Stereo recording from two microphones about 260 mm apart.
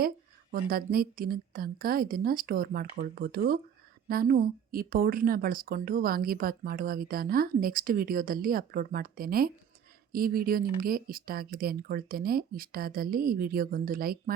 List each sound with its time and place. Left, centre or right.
0.5 s speech: right